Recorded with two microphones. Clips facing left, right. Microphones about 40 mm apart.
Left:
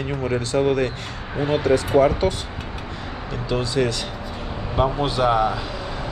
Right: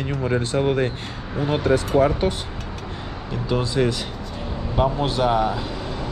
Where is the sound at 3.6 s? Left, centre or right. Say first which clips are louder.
Even; centre.